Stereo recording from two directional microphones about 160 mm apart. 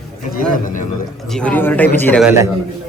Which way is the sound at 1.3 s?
5° left (ahead or behind).